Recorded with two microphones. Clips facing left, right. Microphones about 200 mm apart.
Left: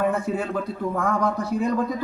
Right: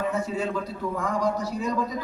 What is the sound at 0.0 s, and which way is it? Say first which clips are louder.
A man's voice: left 3 dB; 55° left (ahead or behind).